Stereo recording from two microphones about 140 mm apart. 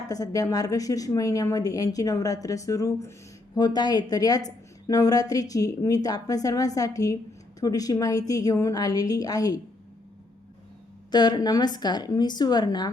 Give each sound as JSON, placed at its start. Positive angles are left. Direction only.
{"t": 0.1, "sound": "a woman's voice", "side_deg": 25}
{"t": 11.1, "sound": "a woman's voice", "side_deg": 30}